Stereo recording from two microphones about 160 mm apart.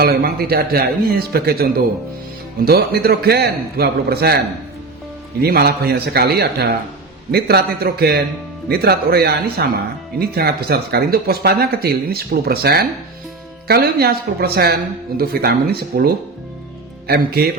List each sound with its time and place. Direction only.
0.0 s a man's voice: 70° right (ahead or behind)
5.4 s a man's voice: 80° right